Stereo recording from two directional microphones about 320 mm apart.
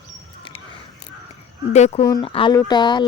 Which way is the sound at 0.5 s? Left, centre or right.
Centre.